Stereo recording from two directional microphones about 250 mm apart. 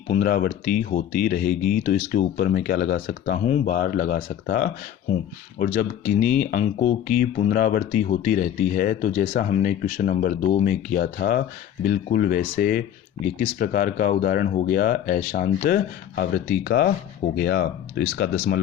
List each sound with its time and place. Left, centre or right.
0.1 s speech: left